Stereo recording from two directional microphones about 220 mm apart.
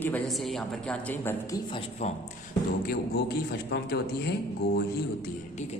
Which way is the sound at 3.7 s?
50° left (ahead or behind).